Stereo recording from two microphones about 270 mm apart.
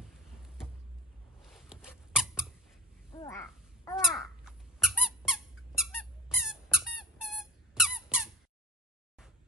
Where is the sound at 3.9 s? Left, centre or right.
Centre.